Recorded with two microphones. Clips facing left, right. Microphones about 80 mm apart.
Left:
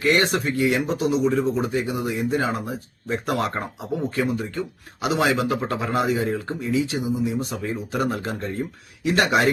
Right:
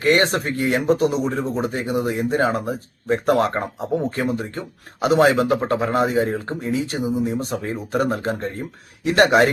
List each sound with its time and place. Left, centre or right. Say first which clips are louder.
0.0 s speech: right 2 dB; right